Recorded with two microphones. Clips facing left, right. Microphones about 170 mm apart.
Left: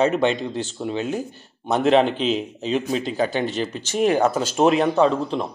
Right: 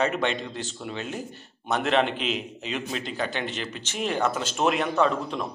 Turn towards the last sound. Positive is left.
turn(degrees=30)  # may be behind; listen again after turning